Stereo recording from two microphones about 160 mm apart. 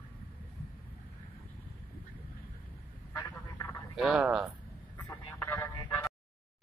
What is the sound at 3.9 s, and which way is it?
Speech, 5° right (ahead or behind).